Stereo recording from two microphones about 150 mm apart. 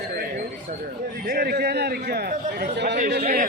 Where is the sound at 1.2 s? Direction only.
90° right.